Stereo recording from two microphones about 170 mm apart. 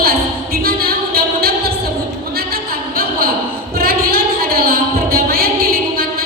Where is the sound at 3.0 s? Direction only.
60° right (ahead or behind).